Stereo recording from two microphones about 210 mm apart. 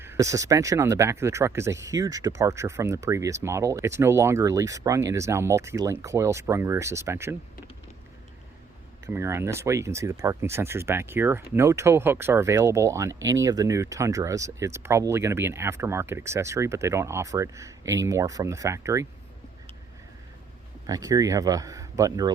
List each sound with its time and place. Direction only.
0.0 s speech: 15° right (ahead or behind)
9.0 s speech: 10° right (ahead or behind)
20.8 s speech: 15° right (ahead or behind)